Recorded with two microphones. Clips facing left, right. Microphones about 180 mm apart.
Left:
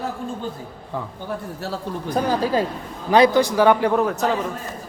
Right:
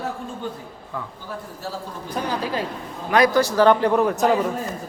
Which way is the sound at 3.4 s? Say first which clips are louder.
Even; 15° left (ahead or behind).